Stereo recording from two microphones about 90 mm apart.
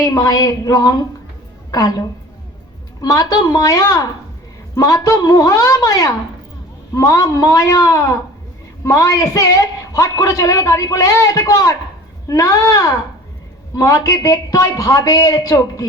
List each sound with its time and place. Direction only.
0.0 s a man's voice: 45° left (ahead or behind)